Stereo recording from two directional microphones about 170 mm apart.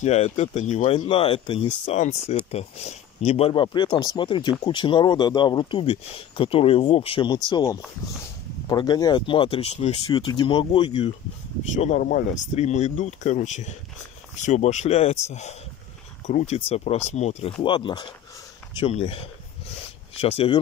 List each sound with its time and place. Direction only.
0.0 s speech: 40° left (ahead or behind)
0.9 s speech: 30° left (ahead or behind)
10.0 s speech: 25° left (ahead or behind)
11.7 s speech: 45° left (ahead or behind)